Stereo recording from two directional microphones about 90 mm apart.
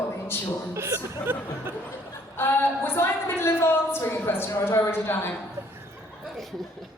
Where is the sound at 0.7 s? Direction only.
30° right (ahead or behind).